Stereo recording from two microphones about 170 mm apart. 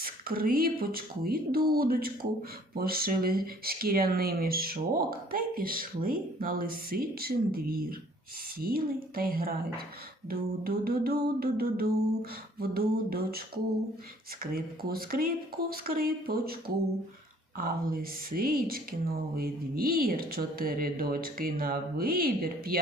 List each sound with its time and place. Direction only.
0.0 s speech: 60° right (ahead or behind)
14.4 s speech: 60° right (ahead or behind)